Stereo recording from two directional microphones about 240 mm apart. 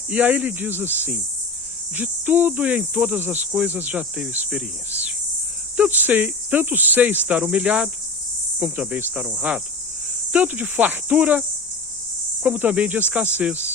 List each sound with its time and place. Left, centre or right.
0.1 s cricket: centre
8.5 s speech: centre
10.3 s cricket: centre